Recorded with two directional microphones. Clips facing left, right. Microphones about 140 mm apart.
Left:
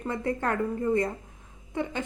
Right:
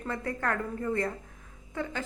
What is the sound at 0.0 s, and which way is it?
A woman's voice, 20° left (ahead or behind).